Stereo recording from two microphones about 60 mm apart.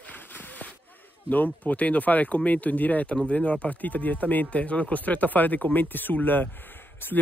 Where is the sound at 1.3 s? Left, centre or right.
Left.